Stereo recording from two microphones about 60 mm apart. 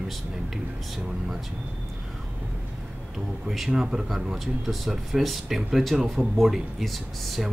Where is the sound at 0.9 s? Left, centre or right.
Centre.